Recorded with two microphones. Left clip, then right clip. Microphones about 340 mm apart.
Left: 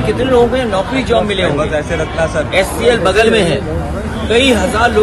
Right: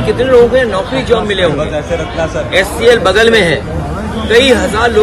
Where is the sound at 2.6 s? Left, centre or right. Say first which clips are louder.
Right 4 dB; centre.